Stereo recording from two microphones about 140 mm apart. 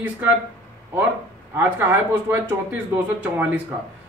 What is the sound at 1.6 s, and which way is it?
A man's voice, 15° right (ahead or behind).